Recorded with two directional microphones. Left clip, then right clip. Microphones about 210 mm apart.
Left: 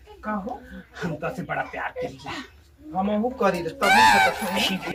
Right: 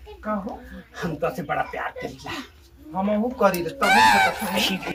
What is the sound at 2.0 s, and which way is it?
Speech, 35° left (ahead or behind).